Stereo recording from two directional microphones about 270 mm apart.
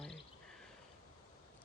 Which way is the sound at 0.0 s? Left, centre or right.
Centre.